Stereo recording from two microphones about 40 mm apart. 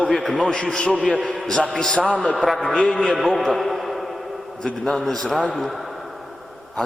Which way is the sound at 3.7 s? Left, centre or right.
Centre.